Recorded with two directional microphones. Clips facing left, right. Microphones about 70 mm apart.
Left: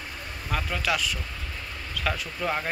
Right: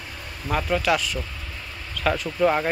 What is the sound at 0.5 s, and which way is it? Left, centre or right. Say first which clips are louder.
Speech: right 6 dB; centre.